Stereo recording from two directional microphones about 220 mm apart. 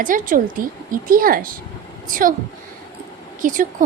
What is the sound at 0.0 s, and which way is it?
A woman's voice, 35° right (ahead or behind).